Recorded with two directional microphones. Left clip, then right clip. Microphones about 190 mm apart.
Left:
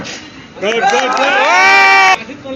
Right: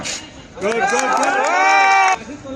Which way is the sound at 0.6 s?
65° right (ahead or behind).